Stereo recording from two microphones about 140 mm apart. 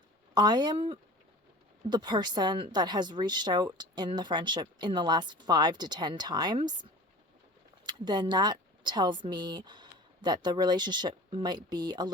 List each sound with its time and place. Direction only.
0.3 s a woman's voice: 30° right (ahead or behind)
7.9 s speech: 30° right (ahead or behind)